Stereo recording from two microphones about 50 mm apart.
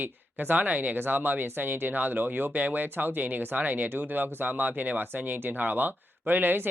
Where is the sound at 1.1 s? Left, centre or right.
Right.